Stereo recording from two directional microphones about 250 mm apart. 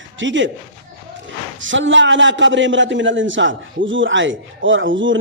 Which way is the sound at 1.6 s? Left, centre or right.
Right.